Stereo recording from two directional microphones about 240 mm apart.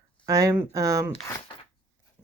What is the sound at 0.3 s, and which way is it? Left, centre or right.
Speech, centre.